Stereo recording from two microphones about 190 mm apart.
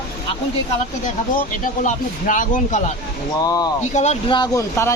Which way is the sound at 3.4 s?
20° left (ahead or behind).